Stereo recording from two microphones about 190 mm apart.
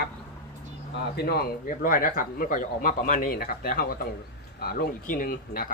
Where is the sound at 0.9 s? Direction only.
55° left (ahead or behind).